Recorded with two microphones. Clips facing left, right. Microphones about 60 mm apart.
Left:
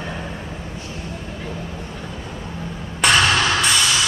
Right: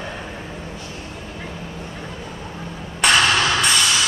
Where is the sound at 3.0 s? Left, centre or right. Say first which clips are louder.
Even; centre.